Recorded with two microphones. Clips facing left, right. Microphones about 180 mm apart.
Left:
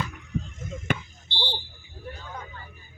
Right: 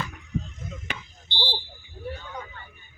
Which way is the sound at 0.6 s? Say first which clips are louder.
Left 7 dB; 50° left (ahead or behind).